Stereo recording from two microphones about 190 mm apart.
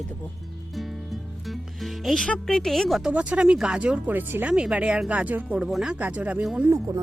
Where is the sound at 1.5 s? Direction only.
Centre (ahead or behind).